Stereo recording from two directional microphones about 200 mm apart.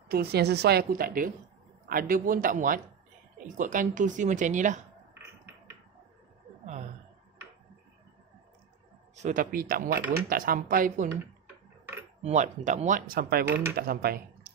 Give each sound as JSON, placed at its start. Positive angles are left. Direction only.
{"t": 0.1, "sound": "speech", "side_deg": -55}
{"t": 9.1, "sound": "speech", "side_deg": -40}
{"t": 12.2, "sound": "speech", "side_deg": -35}